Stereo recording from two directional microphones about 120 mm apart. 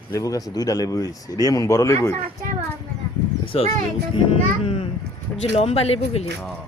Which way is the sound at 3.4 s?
50° left (ahead or behind).